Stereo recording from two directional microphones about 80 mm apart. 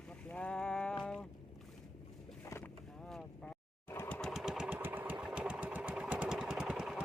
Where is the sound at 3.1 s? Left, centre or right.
Centre.